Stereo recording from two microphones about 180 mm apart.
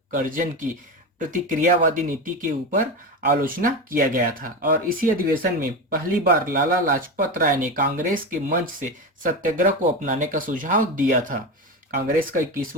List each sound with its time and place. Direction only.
0.1 s speech: 50° right (ahead or behind)